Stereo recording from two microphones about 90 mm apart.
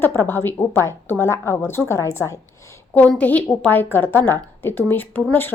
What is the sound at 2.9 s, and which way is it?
A woman's voice, 15° left (ahead or behind).